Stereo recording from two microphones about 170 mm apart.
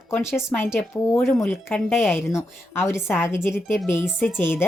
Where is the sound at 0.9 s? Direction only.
15° left (ahead or behind).